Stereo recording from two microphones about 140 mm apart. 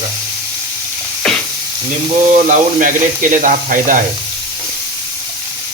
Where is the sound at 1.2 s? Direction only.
5° left (ahead or behind).